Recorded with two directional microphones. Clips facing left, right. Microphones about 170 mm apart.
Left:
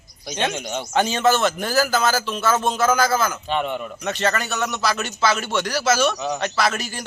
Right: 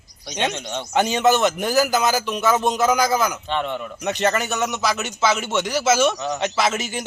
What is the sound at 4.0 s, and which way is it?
A man's voice, 15° right (ahead or behind).